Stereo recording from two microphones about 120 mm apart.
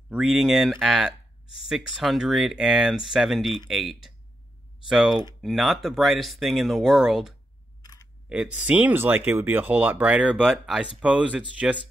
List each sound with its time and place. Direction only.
0.2 s speech: 5° right (ahead or behind)
7.8 s camera: 30° left (ahead or behind)
8.3 s speech: 10° right (ahead or behind)